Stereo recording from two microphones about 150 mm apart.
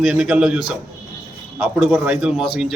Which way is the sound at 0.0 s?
5° right (ahead or behind).